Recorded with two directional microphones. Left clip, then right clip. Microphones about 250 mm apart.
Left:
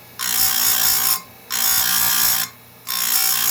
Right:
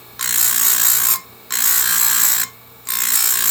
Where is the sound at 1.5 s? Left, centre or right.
Centre.